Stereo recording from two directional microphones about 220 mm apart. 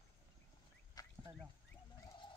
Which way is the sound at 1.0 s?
15° left (ahead or behind).